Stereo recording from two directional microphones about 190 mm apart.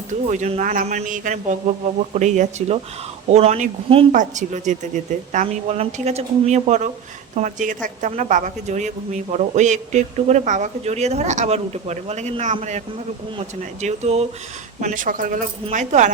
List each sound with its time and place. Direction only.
0.1 s a woman's voice: 40° right (ahead or behind)